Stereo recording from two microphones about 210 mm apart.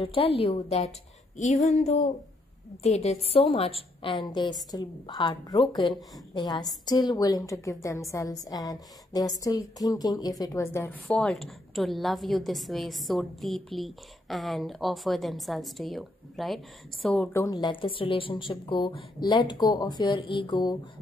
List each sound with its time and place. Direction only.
0.0 s speech: 25° left (ahead or behind)
2.8 s a woman's voice: 30° left (ahead or behind); by 17.3 s centre (ahead or behind)
17.3 s speech: 15° left (ahead or behind)